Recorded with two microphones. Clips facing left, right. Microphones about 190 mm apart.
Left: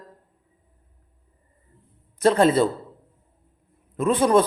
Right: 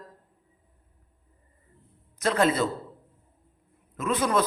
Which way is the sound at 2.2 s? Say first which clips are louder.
Left 6 dB; 30° left (ahead or behind).